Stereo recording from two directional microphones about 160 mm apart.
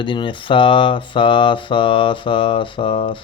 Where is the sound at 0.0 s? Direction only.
30° left (ahead or behind).